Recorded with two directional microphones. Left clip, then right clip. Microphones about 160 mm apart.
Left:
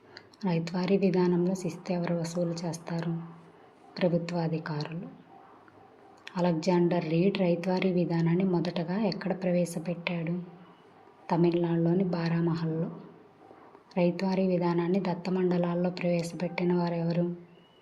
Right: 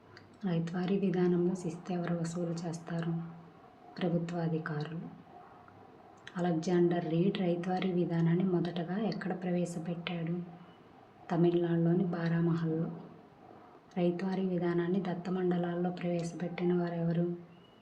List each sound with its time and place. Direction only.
0.4 s a woman's voice: 20° left (ahead or behind)
6.2 s a woman's voice: 20° left (ahead or behind)
13.9 s a woman's voice: 20° left (ahead or behind)